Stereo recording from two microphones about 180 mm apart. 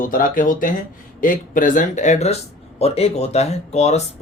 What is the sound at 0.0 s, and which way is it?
Speech, 50° left (ahead or behind).